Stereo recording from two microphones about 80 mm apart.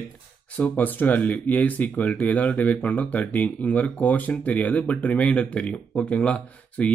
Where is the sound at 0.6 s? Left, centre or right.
Left.